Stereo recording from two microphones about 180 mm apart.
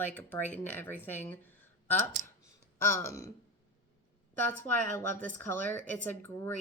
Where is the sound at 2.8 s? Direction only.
15° left (ahead or behind).